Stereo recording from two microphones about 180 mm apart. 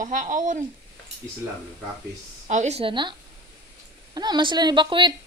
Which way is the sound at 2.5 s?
40° right (ahead or behind).